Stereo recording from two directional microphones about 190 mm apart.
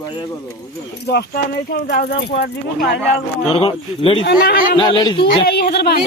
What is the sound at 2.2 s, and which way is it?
Speech, 60° left (ahead or behind).